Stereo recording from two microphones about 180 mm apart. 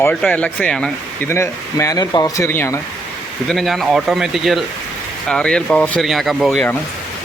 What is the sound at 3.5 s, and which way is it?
Speech, centre (ahead or behind).